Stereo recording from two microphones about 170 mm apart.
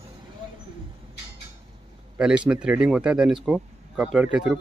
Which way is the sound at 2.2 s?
5° right (ahead or behind).